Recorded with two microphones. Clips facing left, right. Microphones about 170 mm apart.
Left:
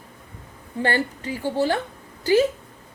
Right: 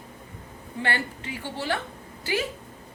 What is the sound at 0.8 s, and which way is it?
A woman's voice, 40° left (ahead or behind).